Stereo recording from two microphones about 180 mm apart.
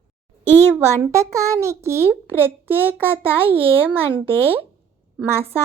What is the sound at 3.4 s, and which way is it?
Speech, 30° right (ahead or behind).